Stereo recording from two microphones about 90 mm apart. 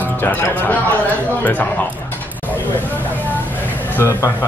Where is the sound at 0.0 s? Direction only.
20° left (ahead or behind).